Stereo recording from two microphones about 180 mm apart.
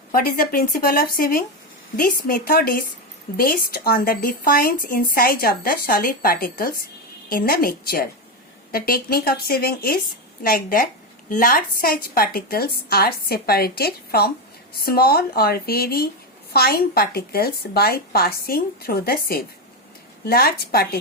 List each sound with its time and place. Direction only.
0.1 s speech: 50° left (ahead or behind)